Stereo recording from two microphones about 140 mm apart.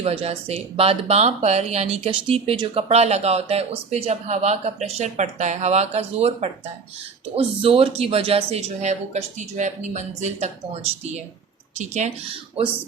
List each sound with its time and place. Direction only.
0.0 s speech: 45° right (ahead or behind)